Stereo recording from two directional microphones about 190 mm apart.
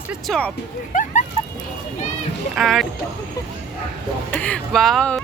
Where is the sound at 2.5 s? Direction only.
Centre (ahead or behind).